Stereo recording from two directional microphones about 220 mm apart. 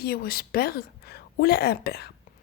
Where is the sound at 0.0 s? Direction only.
45° left (ahead or behind).